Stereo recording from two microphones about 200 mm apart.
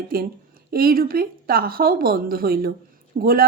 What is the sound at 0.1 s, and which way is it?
Speech, 50° right (ahead or behind).